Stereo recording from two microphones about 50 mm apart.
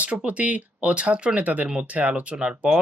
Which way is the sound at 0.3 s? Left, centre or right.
Right.